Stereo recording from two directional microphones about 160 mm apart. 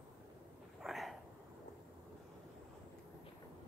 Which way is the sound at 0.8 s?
Centre (ahead or behind).